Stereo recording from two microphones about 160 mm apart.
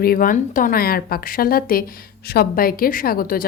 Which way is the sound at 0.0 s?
65° left (ahead or behind).